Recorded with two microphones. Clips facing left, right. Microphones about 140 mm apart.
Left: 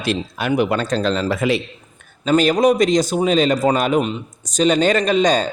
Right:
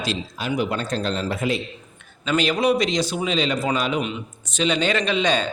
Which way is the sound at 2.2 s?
45° left (ahead or behind).